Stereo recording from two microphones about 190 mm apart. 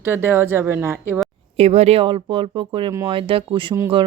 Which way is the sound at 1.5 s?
35° right (ahead or behind).